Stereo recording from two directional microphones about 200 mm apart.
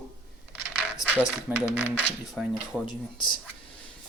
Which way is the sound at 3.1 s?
25° left (ahead or behind).